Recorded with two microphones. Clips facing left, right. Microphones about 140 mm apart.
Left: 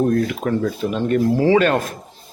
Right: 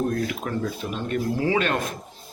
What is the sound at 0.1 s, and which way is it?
Speech, 50° left (ahead or behind).